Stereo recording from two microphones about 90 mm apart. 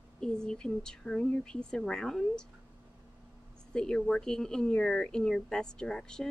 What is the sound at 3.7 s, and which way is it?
A woman's voice, 10° left (ahead or behind).